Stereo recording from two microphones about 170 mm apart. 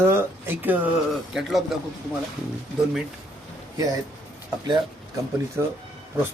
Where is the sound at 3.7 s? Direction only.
20° right (ahead or behind).